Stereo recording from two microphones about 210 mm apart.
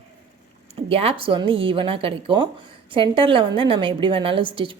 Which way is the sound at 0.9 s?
25° right (ahead or behind).